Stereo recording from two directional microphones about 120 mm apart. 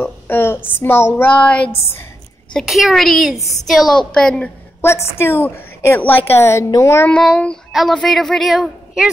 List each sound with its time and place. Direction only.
0.0 s a woman's voice: 15° left (ahead or behind)
2.5 s speech: centre (ahead or behind)
4.8 s a woman's voice: 20° left (ahead or behind)
7.1 s speech: 10° left (ahead or behind)